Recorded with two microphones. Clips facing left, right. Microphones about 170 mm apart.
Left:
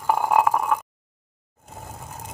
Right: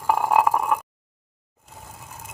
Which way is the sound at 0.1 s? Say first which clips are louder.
Even; 5° right (ahead or behind).